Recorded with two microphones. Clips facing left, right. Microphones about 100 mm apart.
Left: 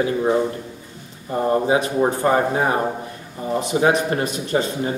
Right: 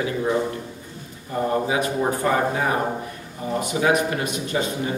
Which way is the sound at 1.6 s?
30° left (ahead or behind).